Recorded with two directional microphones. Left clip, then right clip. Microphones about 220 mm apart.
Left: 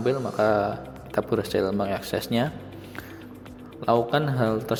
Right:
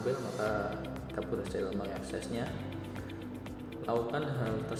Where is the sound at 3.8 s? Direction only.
45° left (ahead or behind).